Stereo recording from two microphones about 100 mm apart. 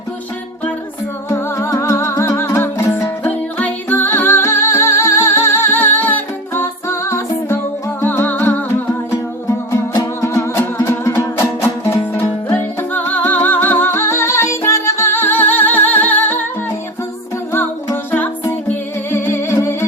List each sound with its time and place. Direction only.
1.3 s music: 30° left (ahead or behind)
9.0 s music: 30° left (ahead or behind)
17.9 s music: 20° left (ahead or behind)